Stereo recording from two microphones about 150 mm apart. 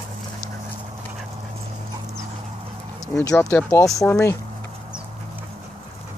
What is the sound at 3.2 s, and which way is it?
Speech, 25° left (ahead or behind).